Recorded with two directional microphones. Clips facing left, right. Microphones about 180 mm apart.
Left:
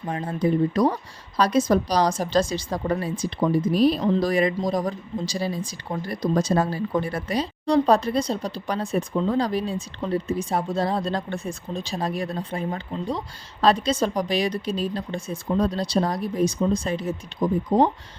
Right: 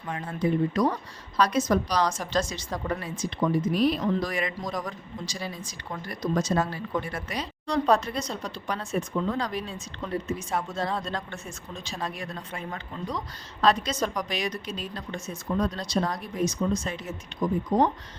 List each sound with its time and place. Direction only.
0.0 s a woman's voice: 35° left (ahead or behind)